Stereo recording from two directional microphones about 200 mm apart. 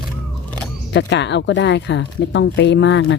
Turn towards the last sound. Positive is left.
turn(degrees=60)  # may be behind; listen again after turning